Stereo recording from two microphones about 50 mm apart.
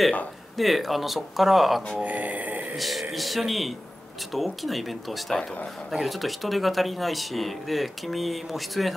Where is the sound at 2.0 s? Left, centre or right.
Right.